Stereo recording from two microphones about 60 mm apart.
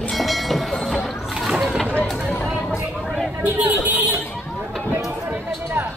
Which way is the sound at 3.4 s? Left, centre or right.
Right.